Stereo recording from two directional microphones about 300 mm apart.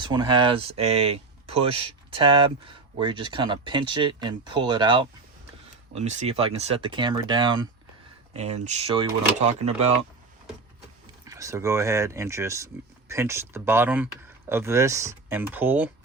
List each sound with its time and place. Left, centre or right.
0.0 s speech: centre
11.3 s speech: centre